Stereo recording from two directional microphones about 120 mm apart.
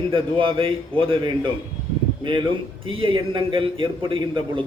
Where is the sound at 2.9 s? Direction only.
45° right (ahead or behind).